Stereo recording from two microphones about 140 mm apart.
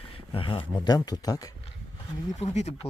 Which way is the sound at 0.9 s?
30° left (ahead or behind).